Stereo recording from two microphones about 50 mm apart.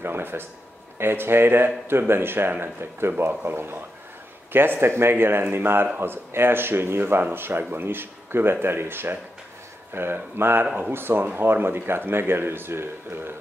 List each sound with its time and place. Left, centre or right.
0.0 s speech: right